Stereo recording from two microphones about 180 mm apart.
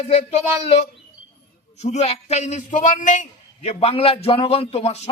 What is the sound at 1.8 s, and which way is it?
A man's voice, 35° left (ahead or behind).